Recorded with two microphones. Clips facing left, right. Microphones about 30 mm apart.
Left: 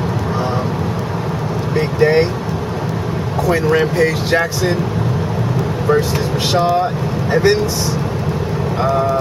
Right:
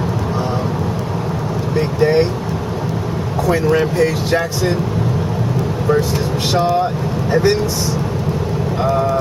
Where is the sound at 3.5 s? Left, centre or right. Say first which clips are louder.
Even; centre.